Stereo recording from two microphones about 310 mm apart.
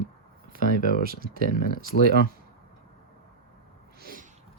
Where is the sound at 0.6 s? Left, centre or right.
Left.